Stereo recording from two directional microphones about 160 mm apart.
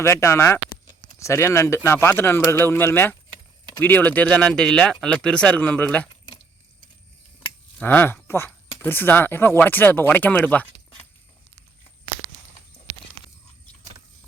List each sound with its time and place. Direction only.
0.0 s speech: 20° left (ahead or behind)
7.8 s speech: 10° left (ahead or behind)